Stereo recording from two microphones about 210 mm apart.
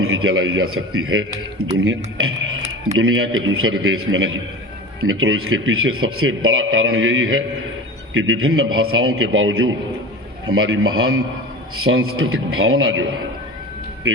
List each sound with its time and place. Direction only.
0.0 s a man's voice: 80° right
3.0 s a man's voice: 75° right (ahead or behind)